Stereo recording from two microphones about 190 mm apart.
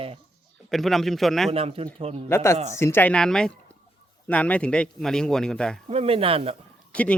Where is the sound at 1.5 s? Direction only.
30° right (ahead or behind).